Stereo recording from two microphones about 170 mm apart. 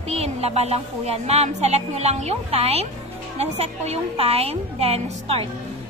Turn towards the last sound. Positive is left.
turn(degrees=-35)  # may be behind; listen again after turning